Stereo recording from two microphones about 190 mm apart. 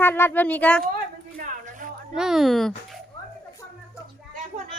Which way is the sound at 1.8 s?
45° right (ahead or behind).